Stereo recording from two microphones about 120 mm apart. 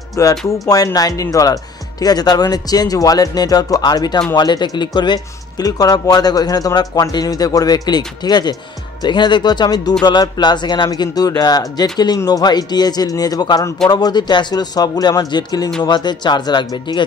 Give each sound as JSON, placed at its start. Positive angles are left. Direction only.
{"t": 0.1, "sound": "speech", "side_deg": 30}